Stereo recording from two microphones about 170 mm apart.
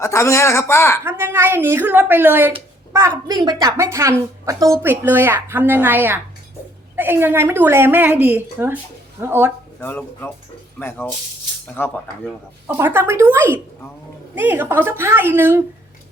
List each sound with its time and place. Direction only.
0.0 s speech: 15° left (ahead or behind)
1.0 s a woman's voice: 15° right (ahead or behind)
3.2 s a woman's voice: 25° right (ahead or behind)
9.8 s speech: 10° left (ahead or behind)
12.6 s a woman's voice: 10° right (ahead or behind)